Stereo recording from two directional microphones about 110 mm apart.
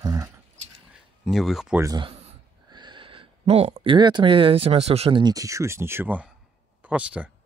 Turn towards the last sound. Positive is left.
turn(degrees=-10)  # may be behind; listen again after turning